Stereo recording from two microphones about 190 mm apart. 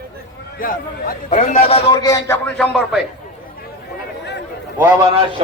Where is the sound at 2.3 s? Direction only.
5° left (ahead or behind).